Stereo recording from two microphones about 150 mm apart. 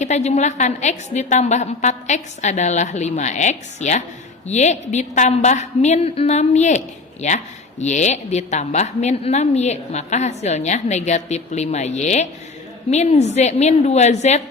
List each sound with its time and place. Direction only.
0.0 s a woman's voice: 50° left (ahead or behind)